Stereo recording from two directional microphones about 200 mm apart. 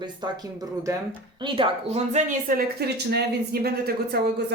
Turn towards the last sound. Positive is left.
turn(degrees=-50)  # may be behind; listen again after turning